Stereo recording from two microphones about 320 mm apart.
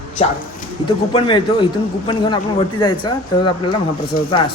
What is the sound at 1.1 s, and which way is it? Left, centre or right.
Speech, centre.